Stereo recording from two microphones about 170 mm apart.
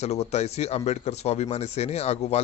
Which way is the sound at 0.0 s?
40° left (ahead or behind).